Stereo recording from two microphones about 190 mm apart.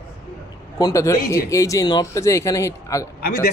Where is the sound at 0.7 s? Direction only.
15° left (ahead or behind).